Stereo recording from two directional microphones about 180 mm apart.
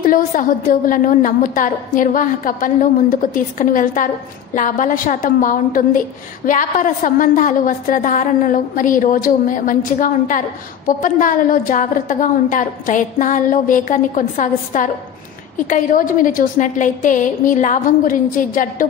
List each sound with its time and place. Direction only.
0.0 s a woman's voice: 50° left (ahead or behind)